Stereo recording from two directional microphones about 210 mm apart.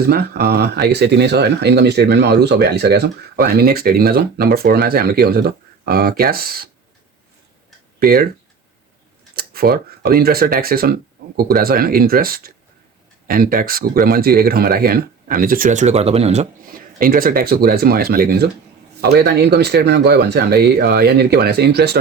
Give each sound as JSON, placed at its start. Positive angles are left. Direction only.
{"t": 0.1, "sound": "speech", "side_deg": -50}
{"t": 7.9, "sound": "speech", "side_deg": -45}
{"t": 9.3, "sound": "speech", "side_deg": -45}